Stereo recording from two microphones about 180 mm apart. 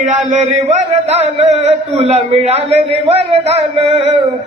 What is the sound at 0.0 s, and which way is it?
A man's voice, 40° right (ahead or behind).